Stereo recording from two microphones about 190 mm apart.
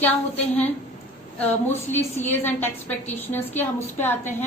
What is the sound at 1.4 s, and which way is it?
A woman's voice, 10° left (ahead or behind).